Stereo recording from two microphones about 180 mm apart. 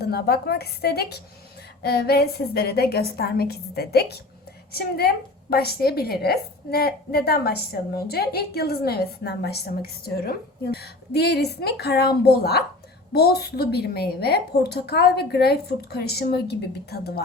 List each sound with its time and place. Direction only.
0.0 s a woman's voice: 60° left (ahead or behind)